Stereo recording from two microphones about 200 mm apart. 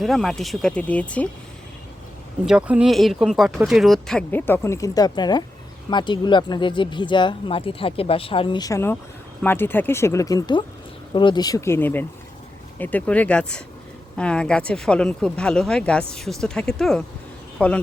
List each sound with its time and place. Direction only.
0.0 s speech: centre (ahead or behind)
2.5 s speech: 5° right (ahead or behind)